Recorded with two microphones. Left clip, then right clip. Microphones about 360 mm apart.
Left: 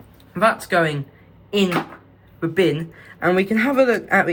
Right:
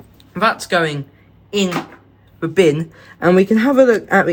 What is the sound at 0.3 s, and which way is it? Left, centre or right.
Speech, centre.